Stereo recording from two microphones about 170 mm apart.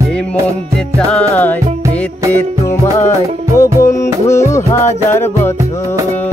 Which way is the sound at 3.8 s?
15° left (ahead or behind).